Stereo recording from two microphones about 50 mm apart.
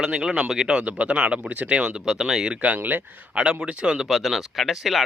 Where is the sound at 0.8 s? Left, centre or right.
Right.